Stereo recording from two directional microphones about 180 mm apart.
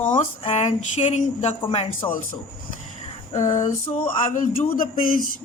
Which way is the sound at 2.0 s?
15° left (ahead or behind).